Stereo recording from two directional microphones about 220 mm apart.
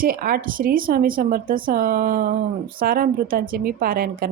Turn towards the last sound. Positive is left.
turn(degrees=-40)  # may be behind; listen again after turning